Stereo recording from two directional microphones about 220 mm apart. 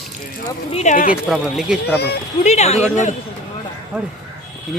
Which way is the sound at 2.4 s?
30° left (ahead or behind).